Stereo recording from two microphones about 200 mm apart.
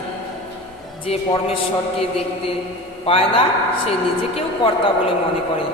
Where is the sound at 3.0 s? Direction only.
30° left (ahead or behind).